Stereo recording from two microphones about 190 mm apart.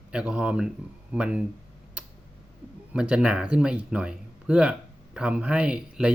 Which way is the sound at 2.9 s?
5° right (ahead or behind).